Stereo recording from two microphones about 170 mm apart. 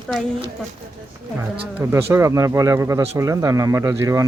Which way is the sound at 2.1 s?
15° right (ahead or behind).